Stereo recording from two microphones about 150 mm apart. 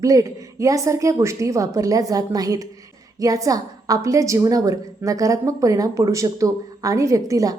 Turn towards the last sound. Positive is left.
turn(degrees=-25)  # may be behind; listen again after turning